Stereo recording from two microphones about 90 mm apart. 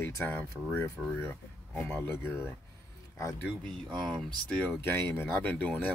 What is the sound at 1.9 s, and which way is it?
Speech, 25° left (ahead or behind).